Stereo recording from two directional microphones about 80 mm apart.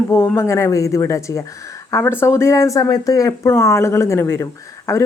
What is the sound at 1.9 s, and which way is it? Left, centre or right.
A woman's voice, left.